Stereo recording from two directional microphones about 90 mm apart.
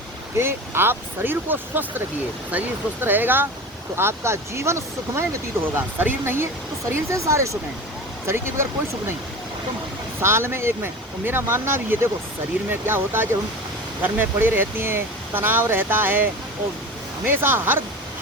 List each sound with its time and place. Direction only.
0.3 s speech: 25° right (ahead or behind)
10.2 s speech: 25° right (ahead or behind)